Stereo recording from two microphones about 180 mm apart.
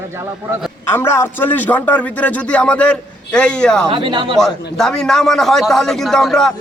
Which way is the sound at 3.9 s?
25° right (ahead or behind).